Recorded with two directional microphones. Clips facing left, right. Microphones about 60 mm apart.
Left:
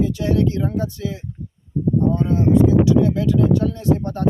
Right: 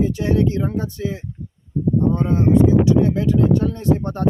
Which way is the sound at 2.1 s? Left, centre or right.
Right.